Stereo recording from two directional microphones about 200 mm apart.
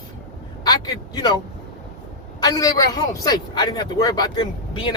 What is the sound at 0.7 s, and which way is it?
Speech, 20° left (ahead or behind).